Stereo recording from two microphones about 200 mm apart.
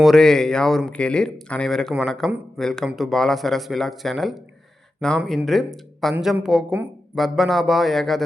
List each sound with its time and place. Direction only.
0.0 s speech: centre (ahead or behind)